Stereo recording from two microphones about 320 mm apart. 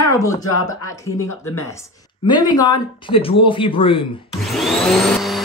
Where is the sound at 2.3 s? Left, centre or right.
Centre.